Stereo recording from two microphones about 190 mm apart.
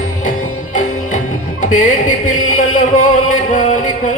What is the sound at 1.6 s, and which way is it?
Music, 40° left (ahead or behind).